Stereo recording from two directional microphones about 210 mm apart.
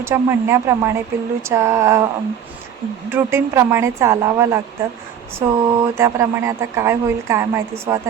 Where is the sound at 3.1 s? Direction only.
10° right (ahead or behind).